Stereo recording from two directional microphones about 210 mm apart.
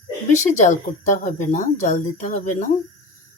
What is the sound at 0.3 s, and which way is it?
Speech, 35° left (ahead or behind).